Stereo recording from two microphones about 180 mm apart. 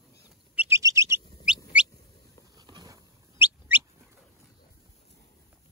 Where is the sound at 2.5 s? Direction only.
25° right (ahead or behind).